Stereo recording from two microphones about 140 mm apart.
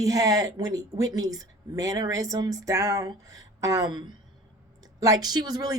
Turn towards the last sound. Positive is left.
turn(degrees=-25)  # may be behind; listen again after turning